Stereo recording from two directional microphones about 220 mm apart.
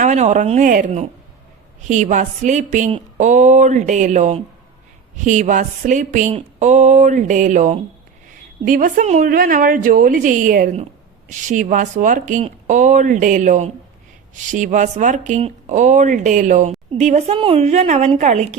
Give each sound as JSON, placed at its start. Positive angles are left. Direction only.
{"t": 0.0, "sound": "a woman's voice", "side_deg": -30}